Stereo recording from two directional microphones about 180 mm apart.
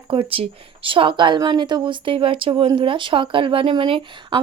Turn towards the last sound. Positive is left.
turn(degrees=-25)  # may be behind; listen again after turning